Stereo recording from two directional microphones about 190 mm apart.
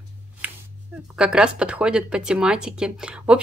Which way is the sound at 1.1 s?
5° right (ahead or behind).